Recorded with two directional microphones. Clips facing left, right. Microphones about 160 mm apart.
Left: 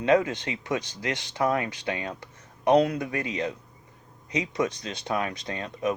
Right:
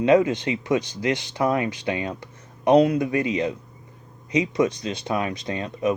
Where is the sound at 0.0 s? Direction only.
15° right (ahead or behind).